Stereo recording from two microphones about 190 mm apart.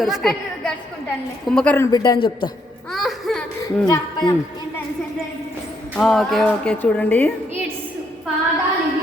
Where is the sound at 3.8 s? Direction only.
20° left (ahead or behind).